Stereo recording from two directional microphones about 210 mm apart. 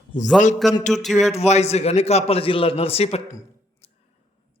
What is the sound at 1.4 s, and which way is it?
Speech, 30° left (ahead or behind).